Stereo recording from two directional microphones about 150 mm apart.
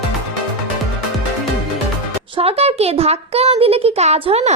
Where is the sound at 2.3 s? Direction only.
40° right (ahead or behind).